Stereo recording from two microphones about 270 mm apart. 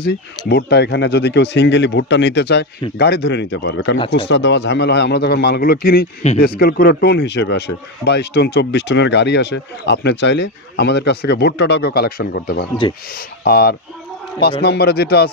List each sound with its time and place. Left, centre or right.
0.0 s speech: left